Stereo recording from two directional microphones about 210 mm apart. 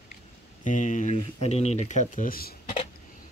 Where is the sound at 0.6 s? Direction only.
35° left (ahead or behind).